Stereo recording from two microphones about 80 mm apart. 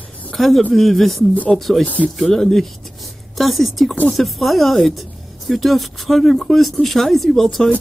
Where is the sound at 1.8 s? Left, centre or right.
Centre.